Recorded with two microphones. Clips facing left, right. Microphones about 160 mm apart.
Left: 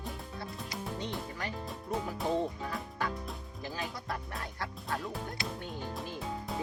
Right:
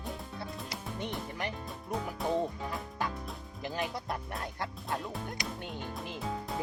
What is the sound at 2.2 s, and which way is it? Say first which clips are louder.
Music: right 1 dB; centre (ahead or behind).